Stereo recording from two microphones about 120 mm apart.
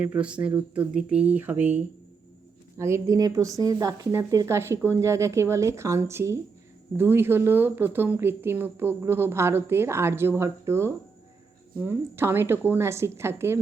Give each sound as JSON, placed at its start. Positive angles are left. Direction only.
{"t": 0.0, "sound": "speech", "side_deg": -10}